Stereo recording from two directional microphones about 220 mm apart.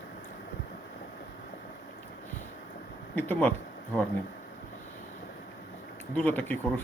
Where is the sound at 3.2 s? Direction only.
10° left (ahead or behind).